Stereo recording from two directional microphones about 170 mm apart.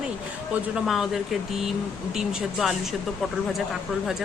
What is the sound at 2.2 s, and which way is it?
Speech, centre (ahead or behind).